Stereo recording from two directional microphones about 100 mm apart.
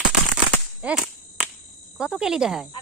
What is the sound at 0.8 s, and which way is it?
Whip, 5° right (ahead or behind).